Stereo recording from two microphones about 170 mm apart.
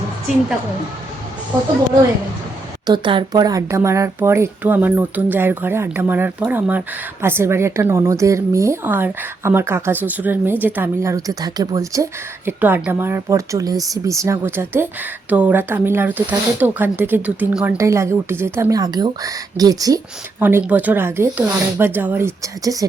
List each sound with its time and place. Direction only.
2.8 s a woman's voice: 25° right (ahead or behind)
20.4 s speech: 10° right (ahead or behind)